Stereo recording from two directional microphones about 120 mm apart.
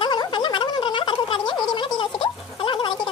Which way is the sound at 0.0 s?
40° left (ahead or behind).